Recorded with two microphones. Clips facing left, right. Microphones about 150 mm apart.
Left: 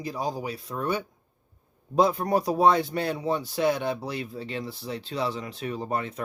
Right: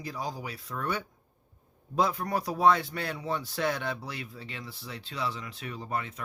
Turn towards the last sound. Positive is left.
turn(degrees=35)  # may be behind; listen again after turning